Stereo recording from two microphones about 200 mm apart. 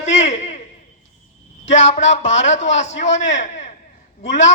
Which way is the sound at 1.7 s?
35° left (ahead or behind).